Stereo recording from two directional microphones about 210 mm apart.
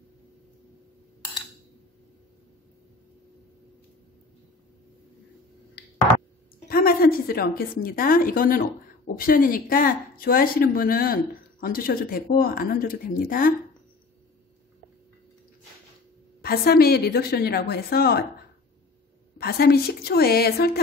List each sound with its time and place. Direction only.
6.7 s a woman's voice: 45° left (ahead or behind)
16.3 s a woman's voice: 45° left (ahead or behind)
19.3 s a woman's voice: 50° left (ahead or behind)